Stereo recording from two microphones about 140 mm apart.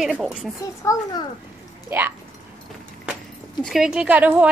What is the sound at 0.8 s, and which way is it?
Speech, 25° left (ahead or behind).